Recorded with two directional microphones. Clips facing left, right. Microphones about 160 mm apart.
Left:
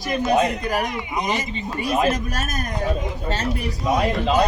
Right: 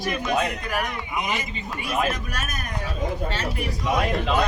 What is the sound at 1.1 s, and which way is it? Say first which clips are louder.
A man's voice: left 3 dB; 40° left (ahead or behind).